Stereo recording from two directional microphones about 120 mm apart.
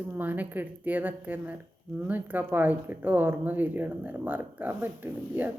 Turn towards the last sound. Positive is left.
turn(degrees=-15)  # may be behind; listen again after turning